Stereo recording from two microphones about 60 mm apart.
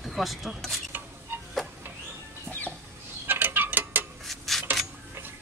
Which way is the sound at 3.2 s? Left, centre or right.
Right.